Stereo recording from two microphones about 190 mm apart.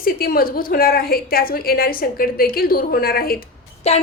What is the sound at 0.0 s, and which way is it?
A woman's voice, 50° left (ahead or behind).